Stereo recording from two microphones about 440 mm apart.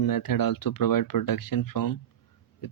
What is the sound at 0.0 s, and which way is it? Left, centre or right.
Speech, left.